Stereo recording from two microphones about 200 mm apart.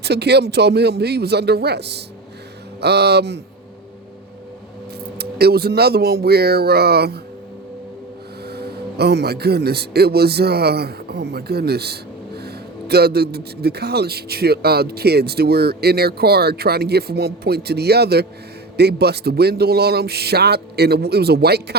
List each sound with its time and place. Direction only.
0.0 s speech: 55° right (ahead or behind)
5.1 s speech: 55° right (ahead or behind)
8.4 s speech: 55° right (ahead or behind)